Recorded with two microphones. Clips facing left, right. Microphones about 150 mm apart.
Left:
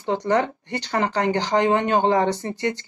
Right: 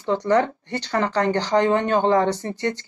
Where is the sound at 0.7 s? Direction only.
15° left (ahead or behind).